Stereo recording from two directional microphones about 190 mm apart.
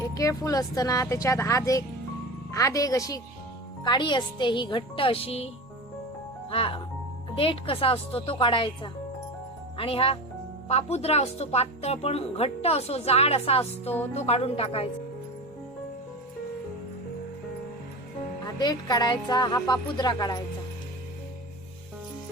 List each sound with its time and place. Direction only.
0.0 s a woman's voice: 15° left (ahead or behind)
6.5 s a woman's voice: 30° left (ahead or behind)
18.6 s a woman's voice: 20° left (ahead or behind)